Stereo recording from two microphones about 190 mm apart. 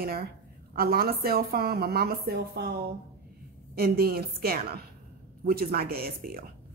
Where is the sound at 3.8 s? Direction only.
50° right (ahead or behind).